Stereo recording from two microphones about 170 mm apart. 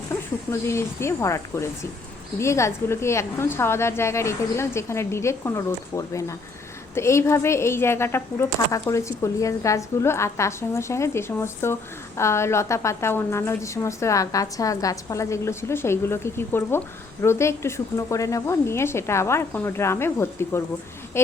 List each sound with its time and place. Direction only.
0.1 s a woman's voice: 15° left (ahead or behind)